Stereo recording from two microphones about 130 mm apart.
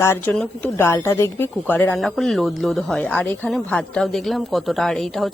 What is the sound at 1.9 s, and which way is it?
Speech, centre (ahead or behind).